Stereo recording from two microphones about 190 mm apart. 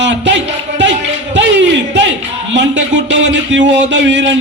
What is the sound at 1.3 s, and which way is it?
Speech, 70° right (ahead or behind).